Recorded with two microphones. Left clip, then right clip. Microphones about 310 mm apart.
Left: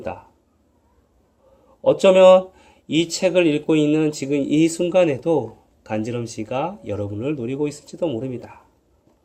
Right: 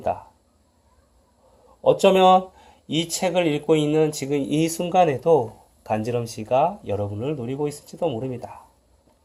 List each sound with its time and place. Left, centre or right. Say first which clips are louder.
1.8 s speech: left 4 dB; centre
7.7 s speech: left 1 dB; right
7.9 s speech: left 1 dB; centre